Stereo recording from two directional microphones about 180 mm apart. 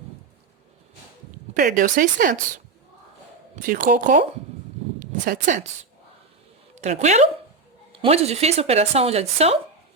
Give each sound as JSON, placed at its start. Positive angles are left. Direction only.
{"t": 1.5, "sound": "speech", "side_deg": -50}
{"t": 3.6, "sound": "speech", "side_deg": -50}
{"t": 6.7, "sound": "speech", "side_deg": -40}